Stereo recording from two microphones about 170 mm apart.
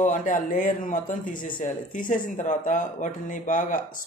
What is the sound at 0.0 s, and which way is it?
Speech, 50° left (ahead or behind).